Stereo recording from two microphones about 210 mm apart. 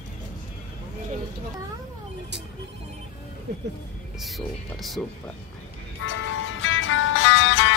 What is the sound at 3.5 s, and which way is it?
Speech, 55° right (ahead or behind).